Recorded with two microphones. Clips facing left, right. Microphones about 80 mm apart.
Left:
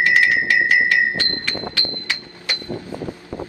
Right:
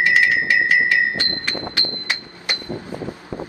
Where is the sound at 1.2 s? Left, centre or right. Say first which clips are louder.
Even; right.